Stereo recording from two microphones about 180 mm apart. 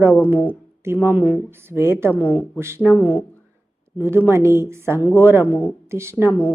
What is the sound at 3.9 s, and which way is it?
Speech, 10° right (ahead or behind).